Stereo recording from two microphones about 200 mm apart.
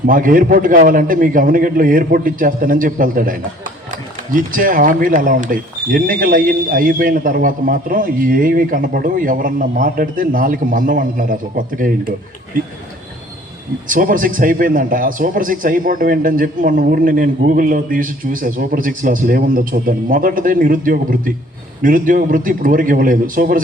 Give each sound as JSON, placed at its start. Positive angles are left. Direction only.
{"t": 0.0, "sound": "speech", "side_deg": -45}
{"t": 13.8, "sound": "speech", "side_deg": -40}